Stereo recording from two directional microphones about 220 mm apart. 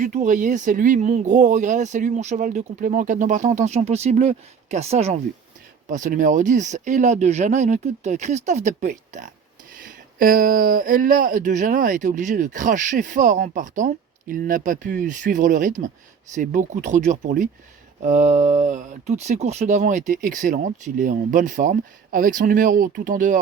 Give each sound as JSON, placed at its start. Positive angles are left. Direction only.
{"t": 0.0, "sound": "speech", "side_deg": -35}